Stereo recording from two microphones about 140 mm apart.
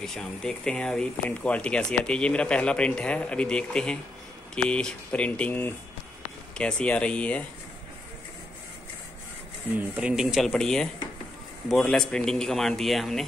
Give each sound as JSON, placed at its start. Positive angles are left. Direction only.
{"t": 0.0, "sound": "speech", "side_deg": 5}
{"t": 9.8, "sound": "speech", "side_deg": -10}